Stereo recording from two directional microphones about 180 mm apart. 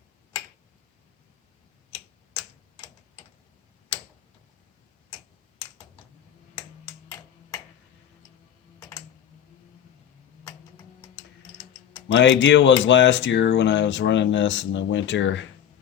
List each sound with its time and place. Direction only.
12.0 s speech: 90° left